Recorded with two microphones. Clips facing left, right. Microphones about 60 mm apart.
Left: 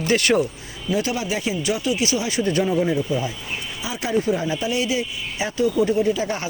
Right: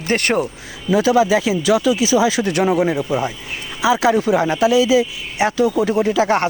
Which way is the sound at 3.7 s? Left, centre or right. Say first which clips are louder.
Right 9 dB; right.